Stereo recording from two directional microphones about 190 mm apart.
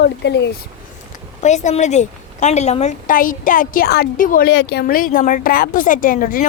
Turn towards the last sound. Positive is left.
turn(degrees=45)  # may be behind; listen again after turning